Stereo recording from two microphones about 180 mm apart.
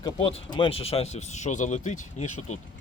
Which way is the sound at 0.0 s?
30° left (ahead or behind).